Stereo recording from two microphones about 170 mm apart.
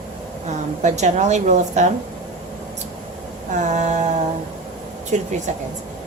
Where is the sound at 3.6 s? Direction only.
45° right (ahead or behind).